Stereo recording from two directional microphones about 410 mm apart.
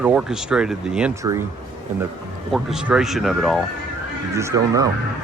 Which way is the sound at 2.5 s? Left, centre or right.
Centre.